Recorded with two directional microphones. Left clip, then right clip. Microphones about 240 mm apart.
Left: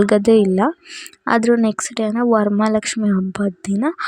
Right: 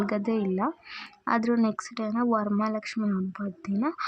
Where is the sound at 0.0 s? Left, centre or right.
Left.